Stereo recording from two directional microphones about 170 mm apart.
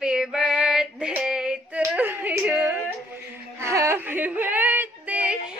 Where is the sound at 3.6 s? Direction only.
15° right (ahead or behind).